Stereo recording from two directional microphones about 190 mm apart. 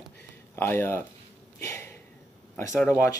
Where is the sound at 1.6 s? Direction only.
15° left (ahead or behind).